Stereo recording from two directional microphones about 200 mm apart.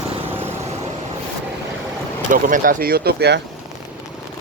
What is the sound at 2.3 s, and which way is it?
Speech, 40° right (ahead or behind).